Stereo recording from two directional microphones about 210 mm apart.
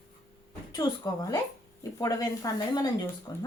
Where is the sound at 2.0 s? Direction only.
15° left (ahead or behind).